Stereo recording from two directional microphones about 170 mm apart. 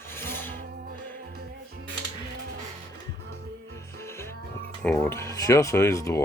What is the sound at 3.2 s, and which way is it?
Music, 80° right.